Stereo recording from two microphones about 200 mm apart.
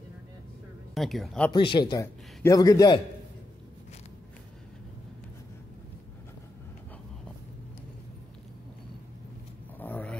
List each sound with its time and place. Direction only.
0.9 s speech: centre (ahead or behind)
1.5 s a man's voice: 25° left (ahead or behind)
9.8 s dog: 10° left (ahead or behind)